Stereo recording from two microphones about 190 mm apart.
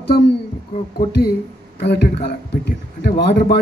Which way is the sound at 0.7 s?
35° left (ahead or behind).